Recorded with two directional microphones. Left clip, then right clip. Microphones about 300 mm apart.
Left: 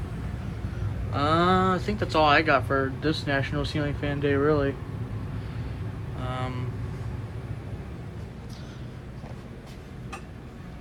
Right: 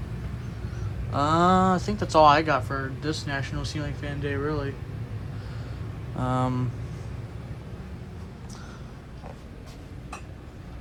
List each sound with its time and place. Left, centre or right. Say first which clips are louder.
1.1 s speech: right 1 dB; centre
6.2 s speech: right 6 dB; centre